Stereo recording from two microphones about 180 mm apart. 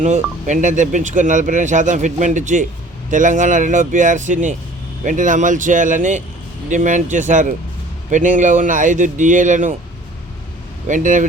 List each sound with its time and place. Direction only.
0.0 s speech: 40° right (ahead or behind)
10.8 s speech: 45° right (ahead or behind)